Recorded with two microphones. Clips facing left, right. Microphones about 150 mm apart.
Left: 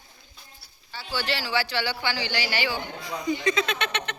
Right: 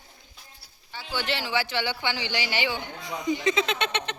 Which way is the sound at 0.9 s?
20° right (ahead or behind).